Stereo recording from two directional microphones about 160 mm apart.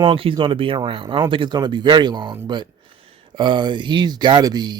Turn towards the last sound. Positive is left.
turn(degrees=-25)  # may be behind; listen again after turning